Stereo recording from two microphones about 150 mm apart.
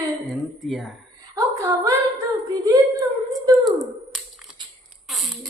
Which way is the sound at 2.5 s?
25° right (ahead or behind).